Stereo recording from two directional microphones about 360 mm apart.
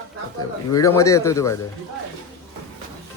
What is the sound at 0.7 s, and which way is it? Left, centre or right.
Speech, centre.